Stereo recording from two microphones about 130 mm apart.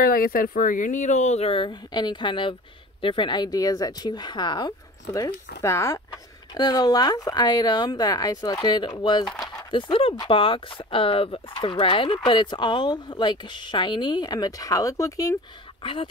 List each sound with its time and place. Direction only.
0.0 s speech: 90° left; by 5.9 s 20° left (ahead or behind)
6.5 s speech: 35° left (ahead or behind)
15.8 s speech: 45° left (ahead or behind)